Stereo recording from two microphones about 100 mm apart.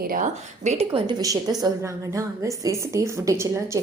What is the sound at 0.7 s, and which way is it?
Speech, 80° right.